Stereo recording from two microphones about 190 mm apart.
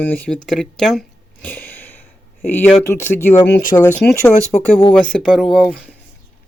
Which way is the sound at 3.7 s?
25° left (ahead or behind).